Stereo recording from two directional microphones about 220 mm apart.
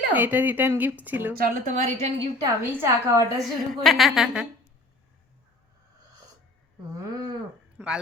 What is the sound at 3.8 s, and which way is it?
Speech, centre (ahead or behind).